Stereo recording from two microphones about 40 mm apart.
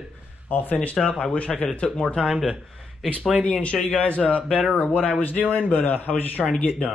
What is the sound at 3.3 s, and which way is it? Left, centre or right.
Speech, left.